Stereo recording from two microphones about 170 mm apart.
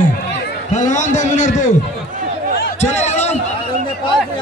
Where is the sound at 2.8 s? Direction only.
40° left (ahead or behind).